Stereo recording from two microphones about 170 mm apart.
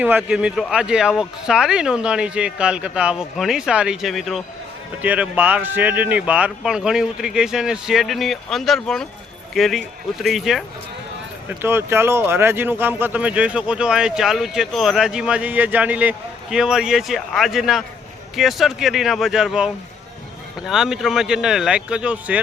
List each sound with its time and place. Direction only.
0.0 s speech: 5° right (ahead or behind)
11.4 s speech: 15° right (ahead or behind)